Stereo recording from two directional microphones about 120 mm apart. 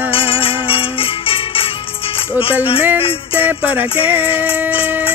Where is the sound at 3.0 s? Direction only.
50° left (ahead or behind).